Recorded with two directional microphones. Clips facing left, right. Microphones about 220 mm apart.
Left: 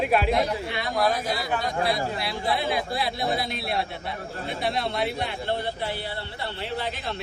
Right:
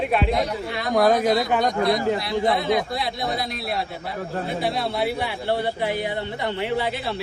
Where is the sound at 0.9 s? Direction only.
50° right (ahead or behind).